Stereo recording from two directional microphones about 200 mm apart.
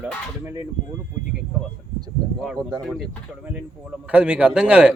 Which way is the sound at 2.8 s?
Centre (ahead or behind).